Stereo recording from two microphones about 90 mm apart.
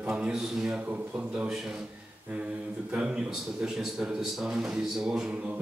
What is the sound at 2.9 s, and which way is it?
A man's voice, 10° right (ahead or behind).